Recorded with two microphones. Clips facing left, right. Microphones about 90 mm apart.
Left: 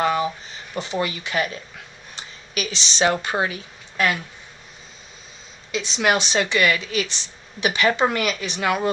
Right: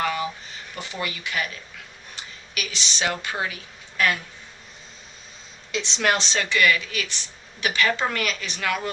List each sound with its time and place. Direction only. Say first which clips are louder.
0.0 s a sound: left 5 dB; 25° left (ahead or behind)
0.7 s a woman's voice: left 7 dB; 25° left (ahead or behind)
5.7 s a woman's voice: left 3 dB; 5° left (ahead or behind); by 8.9 s 25° left (ahead or behind)